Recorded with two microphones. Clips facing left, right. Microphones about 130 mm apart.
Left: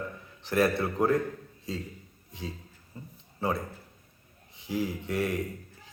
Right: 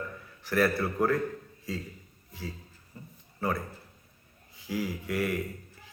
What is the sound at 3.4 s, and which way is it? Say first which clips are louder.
A man's voice: left 1 dB; 25° left (ahead or behind).